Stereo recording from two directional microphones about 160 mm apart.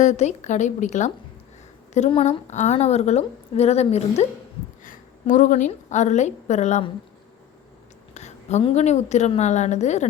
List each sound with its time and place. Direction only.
0.0 s a woman's voice: 50° left (ahead or behind)
4.8 s a woman's voice: 55° left (ahead or behind)
8.1 s a woman's voice: 45° left (ahead or behind)